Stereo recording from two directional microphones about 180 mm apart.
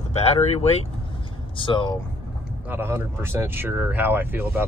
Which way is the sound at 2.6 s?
10° right (ahead or behind).